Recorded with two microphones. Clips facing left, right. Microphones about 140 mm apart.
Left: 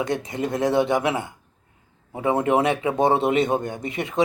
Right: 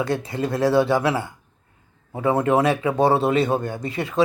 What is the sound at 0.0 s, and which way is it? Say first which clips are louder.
Speech: right 1 dB; 20° left (ahead or behind).